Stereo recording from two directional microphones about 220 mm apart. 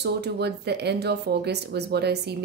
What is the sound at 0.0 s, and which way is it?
Speech, 50° right (ahead or behind).